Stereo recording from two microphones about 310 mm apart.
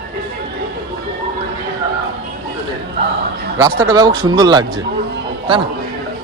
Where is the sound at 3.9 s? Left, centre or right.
Centre.